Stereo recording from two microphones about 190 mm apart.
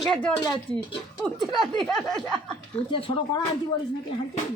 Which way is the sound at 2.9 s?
30° left (ahead or behind).